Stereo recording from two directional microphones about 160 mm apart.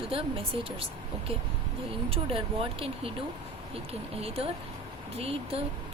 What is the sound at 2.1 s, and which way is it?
Speech, 35° right (ahead or behind).